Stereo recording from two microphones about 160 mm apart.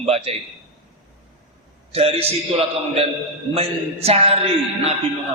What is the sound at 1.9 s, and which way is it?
A man's voice, 40° right (ahead or behind).